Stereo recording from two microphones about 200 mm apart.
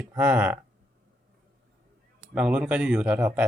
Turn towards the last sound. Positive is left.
turn(degrees=-5)  # may be behind; listen again after turning